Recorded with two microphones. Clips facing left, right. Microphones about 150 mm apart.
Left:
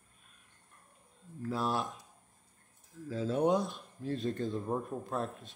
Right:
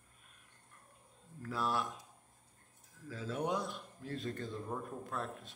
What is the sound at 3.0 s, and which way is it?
Speech, 25° left (ahead or behind).